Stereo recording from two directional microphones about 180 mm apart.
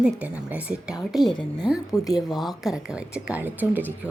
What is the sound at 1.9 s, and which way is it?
Speech, 20° left (ahead or behind).